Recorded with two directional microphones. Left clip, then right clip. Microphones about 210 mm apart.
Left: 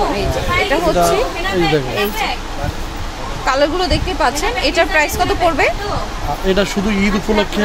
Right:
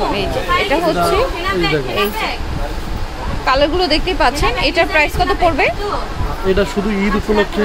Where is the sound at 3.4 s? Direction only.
Centre (ahead or behind).